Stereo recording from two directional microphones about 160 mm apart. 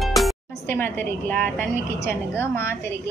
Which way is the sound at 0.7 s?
15° left (ahead or behind).